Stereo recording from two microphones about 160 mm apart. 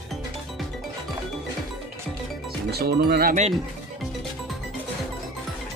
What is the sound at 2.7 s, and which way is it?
Speech, 75° right (ahead or behind).